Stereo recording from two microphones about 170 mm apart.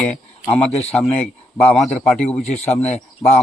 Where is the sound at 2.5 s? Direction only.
40° left (ahead or behind).